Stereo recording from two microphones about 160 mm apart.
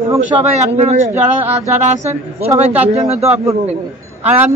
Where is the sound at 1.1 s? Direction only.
15° right (ahead or behind).